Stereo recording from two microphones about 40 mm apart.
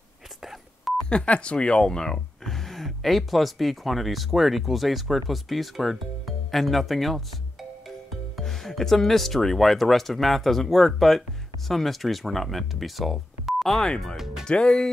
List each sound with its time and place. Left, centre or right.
0.4 s telephone dialing: centre
1.0 s speech: left; by 7.2 s centre
8.4 s speech: centre
13.8 s speech: centre
14.1 s speech: centre
14.4 s speech: centre